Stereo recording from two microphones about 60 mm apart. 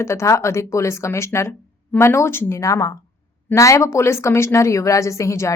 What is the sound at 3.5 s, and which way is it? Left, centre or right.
Speech, left.